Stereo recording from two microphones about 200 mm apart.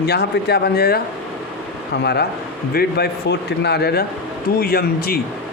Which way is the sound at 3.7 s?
55° left (ahead or behind).